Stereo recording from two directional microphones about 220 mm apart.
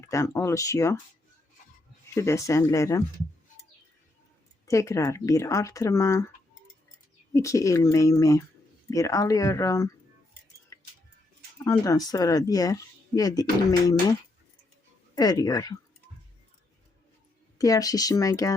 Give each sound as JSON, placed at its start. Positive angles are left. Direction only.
{"t": 0.1, "sound": "speech", "side_deg": 15}
{"t": 2.1, "sound": "speech", "side_deg": 15}
{"t": 4.6, "sound": "speech", "side_deg": 15}
{"t": 7.3, "sound": "speech", "side_deg": 15}
{"t": 11.6, "sound": "speech", "side_deg": 15}
{"t": 15.1, "sound": "speech", "side_deg": 15}
{"t": 17.6, "sound": "speech", "side_deg": 15}